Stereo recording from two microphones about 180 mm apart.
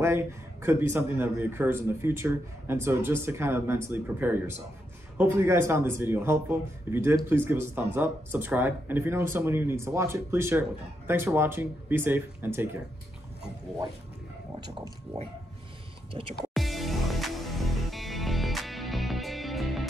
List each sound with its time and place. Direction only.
0.0 s a man's voice: 15° right (ahead or behind)
16.1 s speech: 30° right (ahead or behind)
16.5 s music: centre (ahead or behind)